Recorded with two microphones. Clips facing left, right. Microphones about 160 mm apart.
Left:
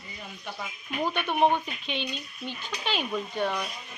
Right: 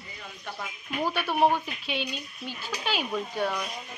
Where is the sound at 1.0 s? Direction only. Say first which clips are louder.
Even; 5° right (ahead or behind).